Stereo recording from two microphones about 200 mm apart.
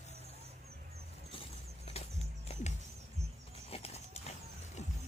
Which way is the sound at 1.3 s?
30° left (ahead or behind).